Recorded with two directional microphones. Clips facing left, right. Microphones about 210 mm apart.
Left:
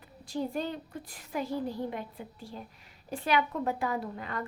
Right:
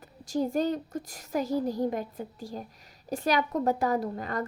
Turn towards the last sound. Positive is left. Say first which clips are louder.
# right 5 dB
turn(degrees=-40)  # may be behind; listen again after turning